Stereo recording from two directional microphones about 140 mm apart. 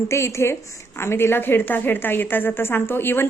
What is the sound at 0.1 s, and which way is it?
A woman's voice, 20° left (ahead or behind).